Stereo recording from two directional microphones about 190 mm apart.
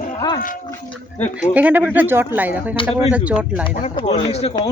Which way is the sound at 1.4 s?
10° right (ahead or behind).